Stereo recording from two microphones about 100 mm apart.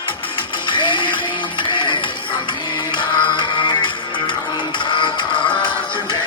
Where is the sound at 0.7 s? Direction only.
55° left (ahead or behind).